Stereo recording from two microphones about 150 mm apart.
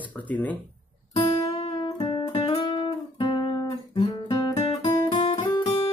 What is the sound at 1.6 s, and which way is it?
Music, 35° left (ahead or behind).